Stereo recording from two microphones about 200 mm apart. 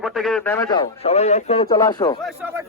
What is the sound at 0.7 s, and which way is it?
Speech, 25° left (ahead or behind).